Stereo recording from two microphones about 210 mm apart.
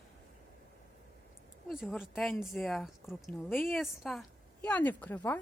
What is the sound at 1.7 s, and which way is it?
A woman's voice, centre (ahead or behind).